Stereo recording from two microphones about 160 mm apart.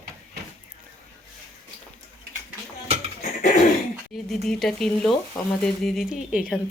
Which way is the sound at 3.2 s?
55° left (ahead or behind).